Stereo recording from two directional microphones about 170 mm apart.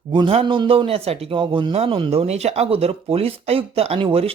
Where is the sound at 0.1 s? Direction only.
30° right (ahead or behind).